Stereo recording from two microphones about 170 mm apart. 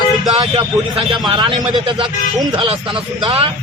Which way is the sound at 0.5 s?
30° right (ahead or behind).